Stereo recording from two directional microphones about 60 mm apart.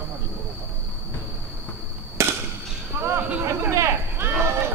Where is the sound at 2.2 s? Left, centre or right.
Right.